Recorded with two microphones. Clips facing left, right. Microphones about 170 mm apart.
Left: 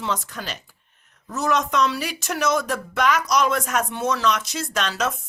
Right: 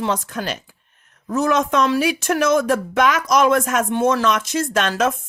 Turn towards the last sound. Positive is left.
turn(degrees=-50)  # may be behind; listen again after turning